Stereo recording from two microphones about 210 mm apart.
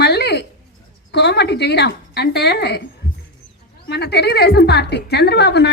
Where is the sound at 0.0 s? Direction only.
50° left (ahead or behind).